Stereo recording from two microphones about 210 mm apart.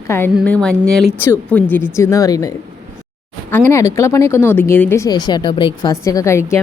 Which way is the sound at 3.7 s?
15° left (ahead or behind).